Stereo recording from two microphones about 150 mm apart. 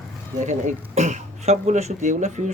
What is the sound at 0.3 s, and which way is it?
Speech, 55° right (ahead or behind).